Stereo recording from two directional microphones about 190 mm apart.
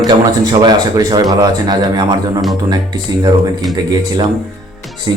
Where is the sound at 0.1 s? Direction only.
20° right (ahead or behind).